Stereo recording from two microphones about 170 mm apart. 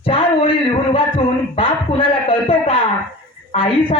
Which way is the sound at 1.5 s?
30° left (ahead or behind).